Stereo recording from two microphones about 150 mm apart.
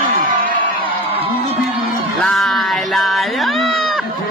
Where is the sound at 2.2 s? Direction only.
Centre (ahead or behind).